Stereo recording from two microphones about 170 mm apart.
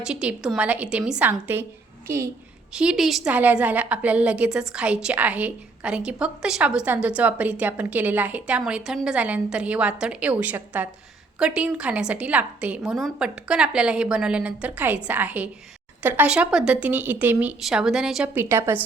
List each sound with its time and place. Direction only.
0.0 s a woman's voice: 5° right (ahead or behind)
2.7 s a woman's voice: 5° right (ahead or behind)